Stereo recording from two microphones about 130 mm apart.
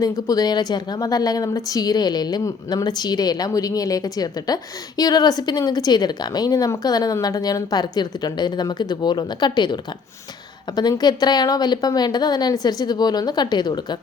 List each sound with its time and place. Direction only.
0.0 s a woman's voice: 30° left (ahead or behind)
10.8 s a woman's voice: 30° left (ahead or behind)